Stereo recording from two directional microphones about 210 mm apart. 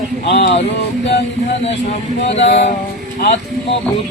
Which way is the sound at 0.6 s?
50° left (ahead or behind).